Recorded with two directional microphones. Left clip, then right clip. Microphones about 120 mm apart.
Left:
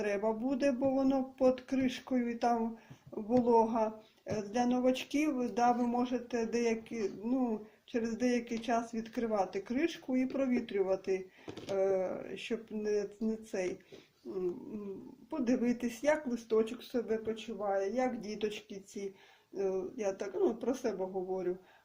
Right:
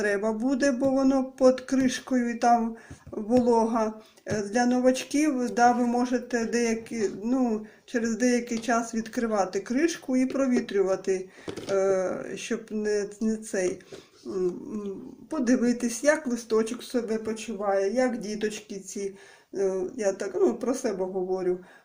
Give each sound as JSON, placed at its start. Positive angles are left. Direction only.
{"t": 0.0, "sound": "speech", "side_deg": 15}
{"t": 14.3, "sound": "dog", "side_deg": -5}
{"t": 15.4, "sound": "speech", "side_deg": 15}